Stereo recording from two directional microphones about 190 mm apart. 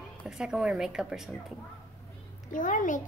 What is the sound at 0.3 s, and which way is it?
A woman's voice, 5° right (ahead or behind).